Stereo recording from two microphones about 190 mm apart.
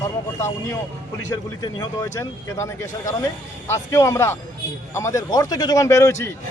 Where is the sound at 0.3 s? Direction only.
15° left (ahead or behind).